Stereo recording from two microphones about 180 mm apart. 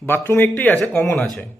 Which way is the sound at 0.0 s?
15° left (ahead or behind).